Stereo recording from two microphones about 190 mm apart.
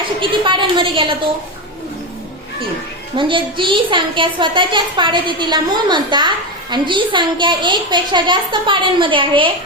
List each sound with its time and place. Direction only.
0.2 s a woman's voice: 25° right (ahead or behind)
3.2 s a woman's voice: 25° right (ahead or behind)